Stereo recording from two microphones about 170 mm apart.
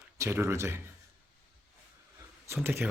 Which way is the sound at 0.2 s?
15° right (ahead or behind).